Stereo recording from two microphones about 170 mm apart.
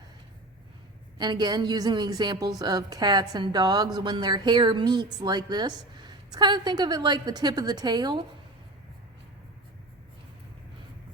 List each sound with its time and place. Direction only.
1.2 s a woman's voice: 25° right (ahead or behind)